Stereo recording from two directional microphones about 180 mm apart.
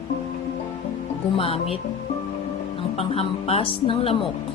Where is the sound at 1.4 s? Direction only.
35° left (ahead or behind).